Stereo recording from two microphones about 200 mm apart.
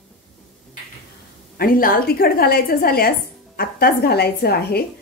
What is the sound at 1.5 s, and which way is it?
A woman's voice, 45° left (ahead or behind).